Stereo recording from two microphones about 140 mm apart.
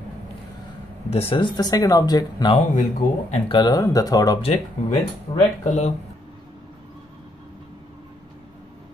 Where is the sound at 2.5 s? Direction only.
55° left (ahead or behind).